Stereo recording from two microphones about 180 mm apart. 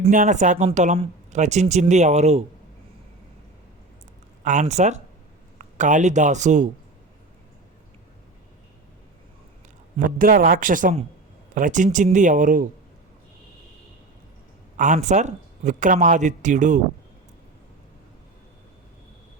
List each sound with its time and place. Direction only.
0.1 s speech: 45° right (ahead or behind)
4.4 s a man's voice: 40° right (ahead or behind)
10.0 s speech: 50° right (ahead or behind)
14.8 s speech: 40° right (ahead or behind)